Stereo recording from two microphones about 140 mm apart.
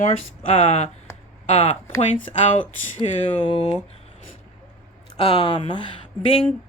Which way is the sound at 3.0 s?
35° left (ahead or behind).